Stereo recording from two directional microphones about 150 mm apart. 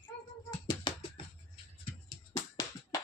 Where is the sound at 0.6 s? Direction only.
35° left (ahead or behind).